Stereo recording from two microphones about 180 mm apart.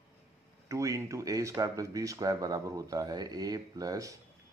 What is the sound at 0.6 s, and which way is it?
A man's voice, 15° right (ahead or behind).